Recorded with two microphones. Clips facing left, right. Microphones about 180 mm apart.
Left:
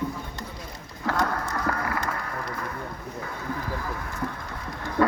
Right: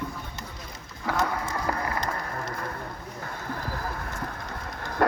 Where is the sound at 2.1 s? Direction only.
40° right (ahead or behind).